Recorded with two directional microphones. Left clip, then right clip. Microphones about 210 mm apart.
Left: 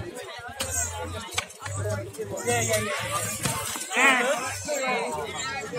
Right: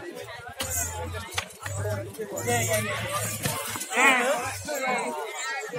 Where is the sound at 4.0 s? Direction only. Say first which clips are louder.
Even; 20° left (ahead or behind).